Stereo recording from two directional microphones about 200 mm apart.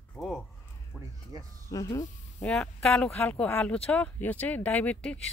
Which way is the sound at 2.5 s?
5° left (ahead or behind).